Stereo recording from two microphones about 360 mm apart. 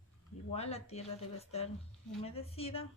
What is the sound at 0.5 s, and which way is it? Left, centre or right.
Speech, centre.